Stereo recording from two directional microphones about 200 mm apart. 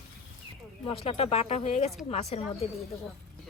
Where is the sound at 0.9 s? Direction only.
30° left (ahead or behind).